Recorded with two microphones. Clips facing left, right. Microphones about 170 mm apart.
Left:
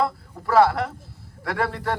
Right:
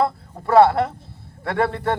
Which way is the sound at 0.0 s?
25° right (ahead or behind).